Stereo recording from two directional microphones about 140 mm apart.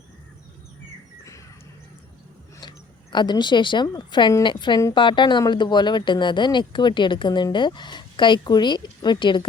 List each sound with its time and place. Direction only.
2.6 s speech: 30° left (ahead or behind)